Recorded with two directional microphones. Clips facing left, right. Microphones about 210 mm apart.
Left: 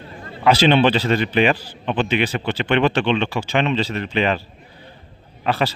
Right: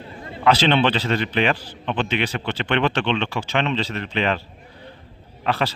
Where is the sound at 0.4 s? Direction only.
10° left (ahead or behind).